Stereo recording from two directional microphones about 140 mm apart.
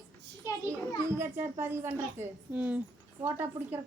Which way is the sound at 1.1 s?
20° right (ahead or behind).